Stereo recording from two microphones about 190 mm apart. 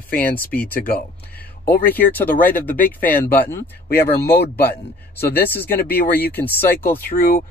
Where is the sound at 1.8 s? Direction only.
10° left (ahead or behind).